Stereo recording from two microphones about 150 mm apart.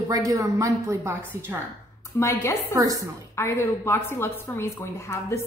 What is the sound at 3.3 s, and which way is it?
A woman's voice, 15° left (ahead or behind).